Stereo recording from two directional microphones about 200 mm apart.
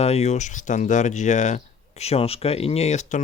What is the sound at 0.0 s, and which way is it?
Speech, 30° left (ahead or behind).